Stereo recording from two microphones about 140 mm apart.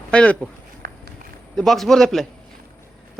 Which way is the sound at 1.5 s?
Centre (ahead or behind).